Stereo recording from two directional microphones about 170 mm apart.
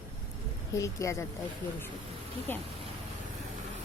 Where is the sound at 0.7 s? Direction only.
20° left (ahead or behind).